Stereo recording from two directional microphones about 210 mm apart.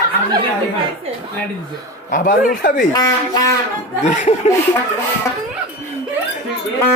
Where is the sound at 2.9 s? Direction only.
15° left (ahead or behind).